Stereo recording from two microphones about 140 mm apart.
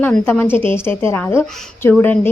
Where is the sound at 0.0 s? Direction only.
15° left (ahead or behind).